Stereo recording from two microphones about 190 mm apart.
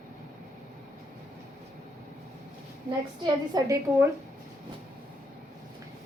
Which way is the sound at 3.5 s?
15° right (ahead or behind).